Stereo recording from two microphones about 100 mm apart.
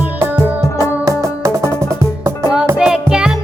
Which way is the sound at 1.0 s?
35° right (ahead or behind).